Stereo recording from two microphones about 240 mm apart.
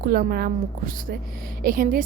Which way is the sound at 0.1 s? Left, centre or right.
Right.